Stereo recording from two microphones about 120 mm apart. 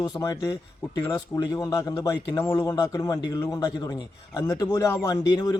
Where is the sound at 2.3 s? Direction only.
20° left (ahead or behind).